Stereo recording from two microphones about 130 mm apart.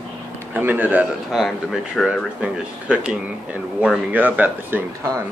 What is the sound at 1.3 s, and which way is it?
Speech, centre (ahead or behind).